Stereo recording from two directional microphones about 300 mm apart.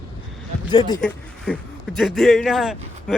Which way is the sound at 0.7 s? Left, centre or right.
Centre.